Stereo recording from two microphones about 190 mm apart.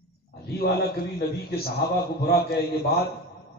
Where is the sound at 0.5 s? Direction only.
55° left (ahead or behind).